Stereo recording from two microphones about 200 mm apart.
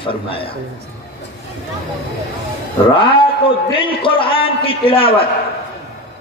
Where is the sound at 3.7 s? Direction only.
25° left (ahead or behind).